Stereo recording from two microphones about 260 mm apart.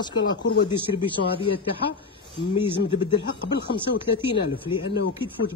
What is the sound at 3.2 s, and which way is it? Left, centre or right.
Speech, left.